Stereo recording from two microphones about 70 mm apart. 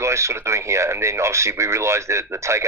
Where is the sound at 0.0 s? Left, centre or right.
Right.